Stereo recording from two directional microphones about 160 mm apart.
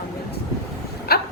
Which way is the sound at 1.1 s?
75° left (ahead or behind).